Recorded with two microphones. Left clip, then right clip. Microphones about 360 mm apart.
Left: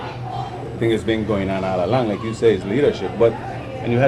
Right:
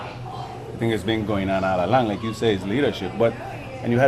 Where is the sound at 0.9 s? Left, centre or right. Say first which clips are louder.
Left 3 dB; right.